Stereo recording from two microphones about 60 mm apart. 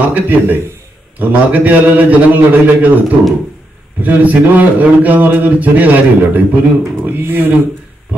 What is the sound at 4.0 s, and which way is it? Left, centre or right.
A man's voice, right.